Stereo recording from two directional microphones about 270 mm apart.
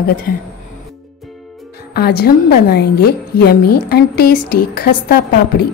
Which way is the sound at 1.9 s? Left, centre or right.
Left.